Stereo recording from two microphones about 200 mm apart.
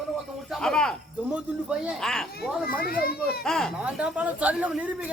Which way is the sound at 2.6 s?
45° left (ahead or behind).